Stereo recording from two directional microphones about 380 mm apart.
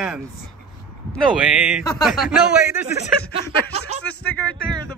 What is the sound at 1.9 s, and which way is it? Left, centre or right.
Speech, centre.